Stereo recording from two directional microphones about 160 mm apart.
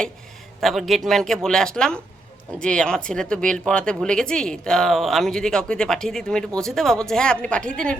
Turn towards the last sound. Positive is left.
turn(degrees=5)  # may be behind; listen again after turning